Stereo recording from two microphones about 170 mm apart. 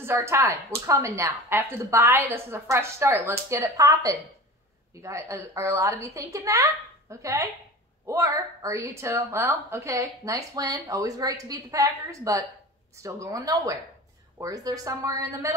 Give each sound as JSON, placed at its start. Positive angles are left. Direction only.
{"t": 0.0, "sound": "a woman's voice", "side_deg": -15}